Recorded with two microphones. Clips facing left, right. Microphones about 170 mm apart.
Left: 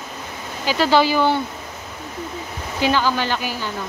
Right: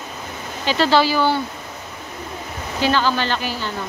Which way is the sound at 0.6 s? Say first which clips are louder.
Even; 10° left (ahead or behind).